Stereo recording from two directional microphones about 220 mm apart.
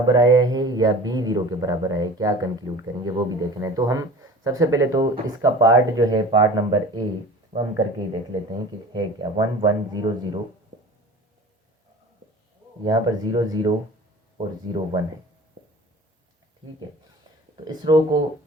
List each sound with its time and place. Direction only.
0.0 s speech: 20° right (ahead or behind)
12.8 s speech: 20° right (ahead or behind)
17.8 s speech: 20° right (ahead or behind)